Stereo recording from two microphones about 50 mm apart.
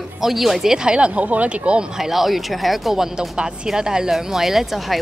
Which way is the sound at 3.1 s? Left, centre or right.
Centre.